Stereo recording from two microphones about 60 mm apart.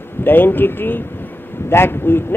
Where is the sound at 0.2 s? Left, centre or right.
Left.